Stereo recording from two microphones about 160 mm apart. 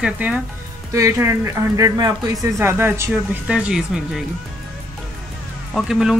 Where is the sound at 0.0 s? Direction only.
10° right (ahead or behind).